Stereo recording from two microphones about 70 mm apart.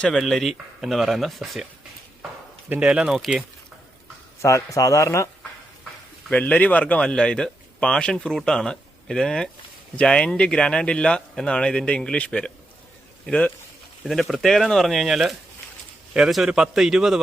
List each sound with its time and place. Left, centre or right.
0.2 s speech: centre
2.8 s speech: centre
3.2 s speech: centre
4.4 s speech: left
6.3 s speech: left
14.1 s speech: centre